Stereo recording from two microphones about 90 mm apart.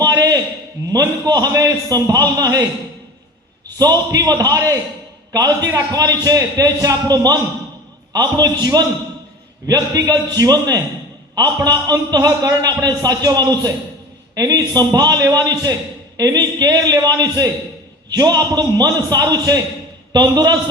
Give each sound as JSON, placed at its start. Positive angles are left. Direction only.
{"t": 0.0, "sound": "a sound", "side_deg": -45}
{"t": 0.9, "sound": "a man's voice", "side_deg": -45}
{"t": 3.8, "sound": "a man's voice", "side_deg": -45}